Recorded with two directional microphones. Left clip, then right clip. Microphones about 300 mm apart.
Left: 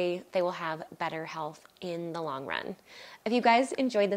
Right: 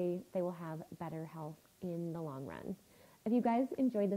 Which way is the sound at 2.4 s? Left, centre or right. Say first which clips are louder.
Left 12 dB; centre.